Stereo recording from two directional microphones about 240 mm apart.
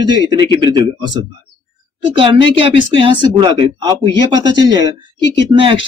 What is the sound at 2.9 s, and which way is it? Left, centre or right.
Speech, right.